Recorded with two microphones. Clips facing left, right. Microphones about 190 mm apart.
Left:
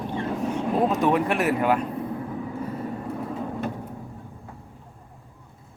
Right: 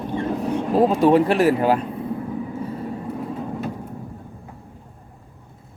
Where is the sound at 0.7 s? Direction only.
30° right (ahead or behind).